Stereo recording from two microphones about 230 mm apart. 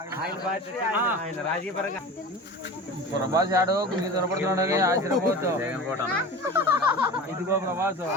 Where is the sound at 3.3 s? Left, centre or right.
Centre.